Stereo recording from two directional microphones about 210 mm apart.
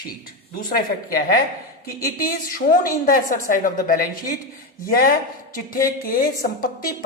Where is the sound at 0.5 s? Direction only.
45° left (ahead or behind).